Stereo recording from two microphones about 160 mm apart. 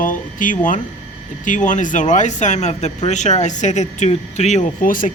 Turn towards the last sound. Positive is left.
turn(degrees=55)  # may be behind; listen again after turning